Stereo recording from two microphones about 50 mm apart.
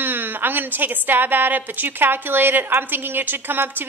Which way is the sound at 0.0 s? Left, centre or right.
Right.